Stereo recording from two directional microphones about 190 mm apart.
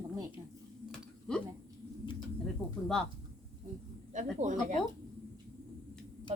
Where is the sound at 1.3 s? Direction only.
5° left (ahead or behind).